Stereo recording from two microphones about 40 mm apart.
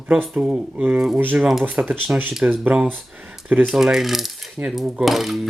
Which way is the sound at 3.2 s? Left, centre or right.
Centre.